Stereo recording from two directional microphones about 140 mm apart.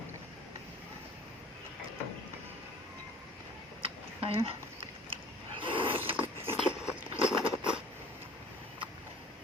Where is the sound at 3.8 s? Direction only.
40° right (ahead or behind).